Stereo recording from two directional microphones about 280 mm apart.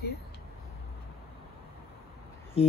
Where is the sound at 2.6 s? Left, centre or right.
Centre.